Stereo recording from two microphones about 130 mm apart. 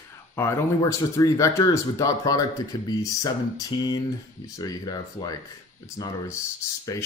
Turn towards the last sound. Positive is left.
turn(degrees=25)  # may be behind; listen again after turning